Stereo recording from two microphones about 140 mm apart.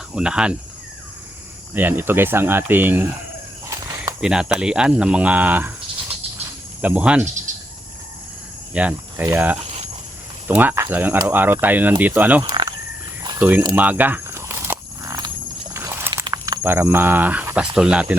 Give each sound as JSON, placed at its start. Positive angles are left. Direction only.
{"t": 0.1, "sound": "speech", "side_deg": -5}
{"t": 1.7, "sound": "speech", "side_deg": -15}
{"t": 3.7, "sound": "a sound", "side_deg": -25}
{"t": 4.2, "sound": "speech", "side_deg": -5}
{"t": 6.8, "sound": "speech", "side_deg": -10}
{"t": 7.5, "sound": "cricket", "side_deg": -65}
{"t": 8.7, "sound": "speech", "side_deg": -10}
{"t": 12.4, "sound": "speech", "side_deg": -30}
{"t": 13.7, "sound": "a sound", "side_deg": -10}
{"t": 15.7, "sound": "walk", "side_deg": -20}
{"t": 16.3, "sound": "speech", "side_deg": -20}